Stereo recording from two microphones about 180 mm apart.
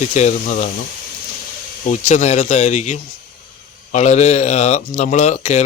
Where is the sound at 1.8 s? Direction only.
40° left (ahead or behind).